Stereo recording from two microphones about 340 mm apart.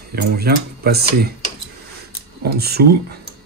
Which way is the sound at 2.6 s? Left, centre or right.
Right.